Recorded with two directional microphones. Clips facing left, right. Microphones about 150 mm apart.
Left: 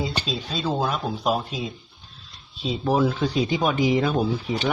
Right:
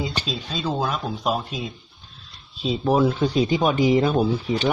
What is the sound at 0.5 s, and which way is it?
Speech, 10° left (ahead or behind).